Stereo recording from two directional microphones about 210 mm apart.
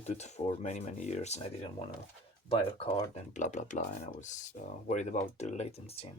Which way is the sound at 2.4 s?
25° left (ahead or behind).